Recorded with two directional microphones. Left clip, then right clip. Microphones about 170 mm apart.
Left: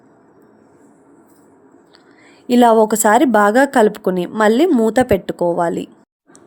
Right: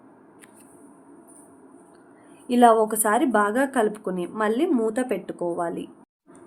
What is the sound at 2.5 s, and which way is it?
A woman's voice, 45° left (ahead or behind).